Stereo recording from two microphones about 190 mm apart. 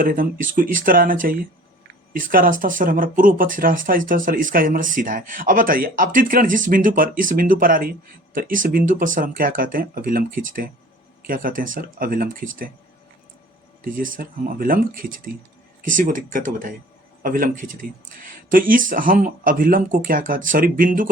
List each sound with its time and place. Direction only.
0.0 s speech: 45° right (ahead or behind)
13.8 s speech: 45° right (ahead or behind)